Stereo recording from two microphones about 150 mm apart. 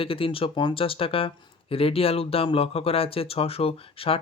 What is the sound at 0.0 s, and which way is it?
Speech, 35° left (ahead or behind).